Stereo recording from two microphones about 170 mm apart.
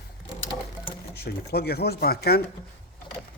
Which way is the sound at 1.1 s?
70° left (ahead or behind).